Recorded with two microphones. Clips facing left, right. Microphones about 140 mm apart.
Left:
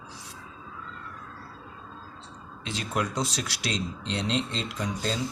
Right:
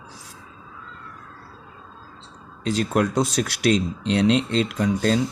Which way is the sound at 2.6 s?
50° right (ahead or behind).